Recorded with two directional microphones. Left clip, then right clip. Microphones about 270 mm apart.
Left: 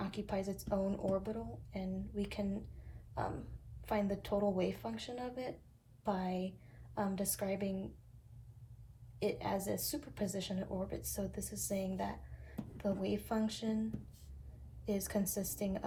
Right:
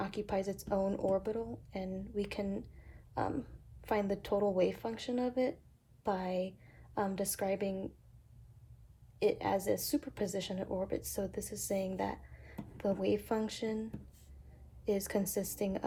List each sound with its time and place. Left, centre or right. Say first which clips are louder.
0.0 s a woman's voice: right 4 dB; right
3.8 s a woman's voice: right 3 dB; right
9.1 s a woman's voice: right 5 dB; right
14.8 s a woman's voice: right 4 dB; right